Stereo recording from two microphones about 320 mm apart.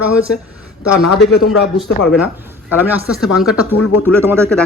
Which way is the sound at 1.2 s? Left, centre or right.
Left.